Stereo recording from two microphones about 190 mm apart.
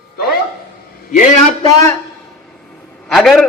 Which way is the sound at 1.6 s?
15° left (ahead or behind).